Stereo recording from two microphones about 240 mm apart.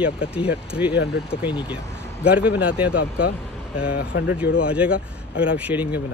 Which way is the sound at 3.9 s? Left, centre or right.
Left.